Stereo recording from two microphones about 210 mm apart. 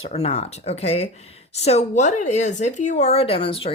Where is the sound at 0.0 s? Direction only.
30° left (ahead or behind).